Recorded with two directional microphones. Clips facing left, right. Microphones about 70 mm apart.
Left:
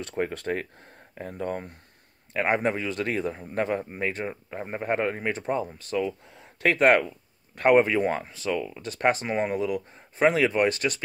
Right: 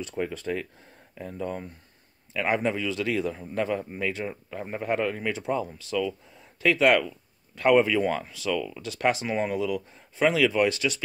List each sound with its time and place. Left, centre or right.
0.3 s speech: left
0.6 s speech: left
6.2 s a sound: left
6.7 s speech: left
8.8 s speech: left